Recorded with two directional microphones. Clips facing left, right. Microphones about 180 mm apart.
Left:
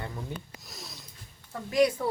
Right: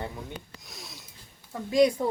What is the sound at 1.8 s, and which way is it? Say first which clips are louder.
Speech: right 2 dB; 15° right (ahead or behind).